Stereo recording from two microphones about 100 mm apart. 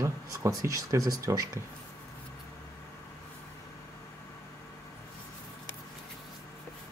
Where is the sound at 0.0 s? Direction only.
30° right (ahead or behind).